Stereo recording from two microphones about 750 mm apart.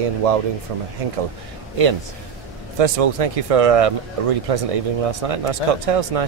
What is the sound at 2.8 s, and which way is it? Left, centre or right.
Speech, right.